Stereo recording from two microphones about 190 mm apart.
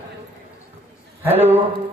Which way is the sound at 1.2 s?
10° right (ahead or behind).